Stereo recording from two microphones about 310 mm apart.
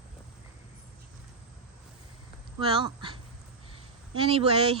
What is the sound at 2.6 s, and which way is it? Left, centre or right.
Speech, centre.